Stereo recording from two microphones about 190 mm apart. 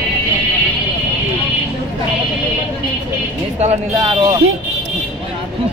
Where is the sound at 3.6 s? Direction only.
30° right (ahead or behind).